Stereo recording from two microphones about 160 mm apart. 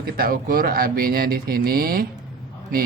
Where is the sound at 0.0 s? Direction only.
65° right (ahead or behind).